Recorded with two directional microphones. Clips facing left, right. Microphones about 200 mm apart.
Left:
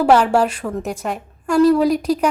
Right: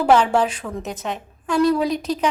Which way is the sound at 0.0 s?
10° left (ahead or behind).